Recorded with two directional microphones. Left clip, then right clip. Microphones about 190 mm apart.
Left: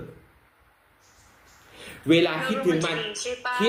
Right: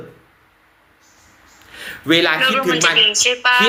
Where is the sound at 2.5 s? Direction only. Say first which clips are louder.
Right 9 dB; 35° right (ahead or behind).